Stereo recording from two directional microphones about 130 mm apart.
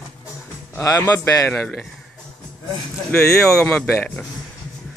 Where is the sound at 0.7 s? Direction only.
25° left (ahead or behind).